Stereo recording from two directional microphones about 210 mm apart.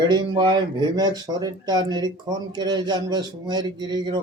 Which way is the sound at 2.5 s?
20° right (ahead or behind).